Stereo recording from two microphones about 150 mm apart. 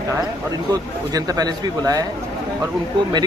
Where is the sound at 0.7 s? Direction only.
25° right (ahead or behind).